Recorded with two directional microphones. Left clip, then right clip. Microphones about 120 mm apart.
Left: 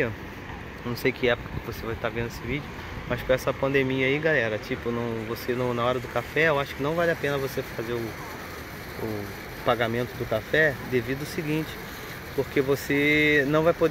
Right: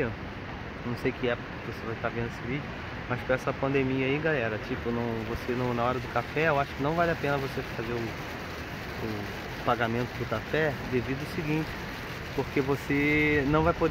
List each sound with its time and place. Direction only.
1.0 s speech: 50° left (ahead or behind)
2.0 s speech: 30° left (ahead or behind); by 7.4 s 10° left (ahead or behind)
9.7 s speech: 15° left (ahead or behind)
12.5 s speech: 10° left (ahead or behind)